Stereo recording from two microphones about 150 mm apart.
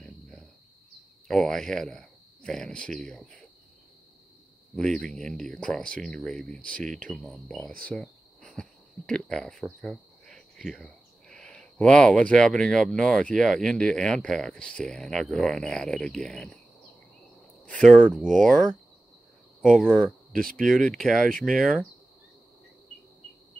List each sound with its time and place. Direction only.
1.2 s speech: centre (ahead or behind)
4.7 s speech: 5° left (ahead or behind)
7.9 s cricket: 5° left (ahead or behind)
9.8 s speech: 5° left (ahead or behind)
17.6 s speech: 5° left (ahead or behind)
20.3 s speech: 70° right (ahead or behind)
20.6 s speech: 5° left (ahead or behind)